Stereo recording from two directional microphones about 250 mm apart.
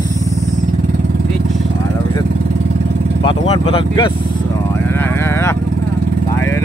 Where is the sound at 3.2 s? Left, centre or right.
Left.